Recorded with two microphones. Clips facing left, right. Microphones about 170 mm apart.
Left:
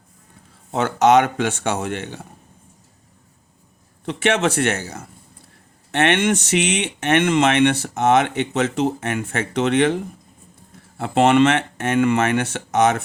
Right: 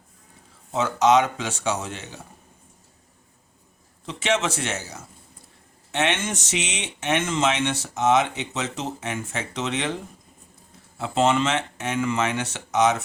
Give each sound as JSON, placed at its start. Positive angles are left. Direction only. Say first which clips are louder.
{"t": 0.7, "sound": "speech", "louder": "left 4 dB", "side_deg": 60}
{"t": 4.0, "sound": "speech", "louder": "left 5 dB", "side_deg": 60}
{"t": 10.9, "sound": "speech", "louder": "left 6 dB", "side_deg": 60}